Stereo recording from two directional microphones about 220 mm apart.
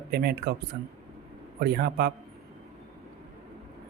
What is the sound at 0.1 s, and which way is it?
Speech, 45° right (ahead or behind).